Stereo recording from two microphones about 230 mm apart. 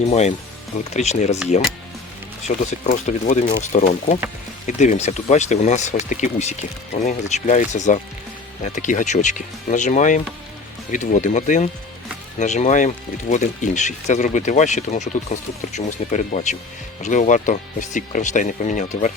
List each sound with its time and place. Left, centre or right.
0.0 s speech: left
2.4 s speech: left